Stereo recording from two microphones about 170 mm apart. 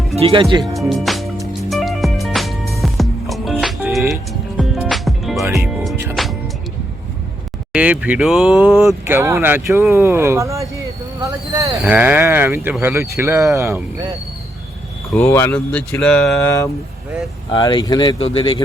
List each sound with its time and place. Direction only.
0.2 s speech: 35° right (ahead or behind)
0.8 s music: centre (ahead or behind)
7.7 s speech: 10° right (ahead or behind)
9.0 s speech: 15° right (ahead or behind)
9.9 s a sound: 15° right (ahead or behind)
11.8 s speech: 10° right (ahead or behind)
15.1 s speech: 15° left (ahead or behind)
17.5 s speech: 25° left (ahead or behind)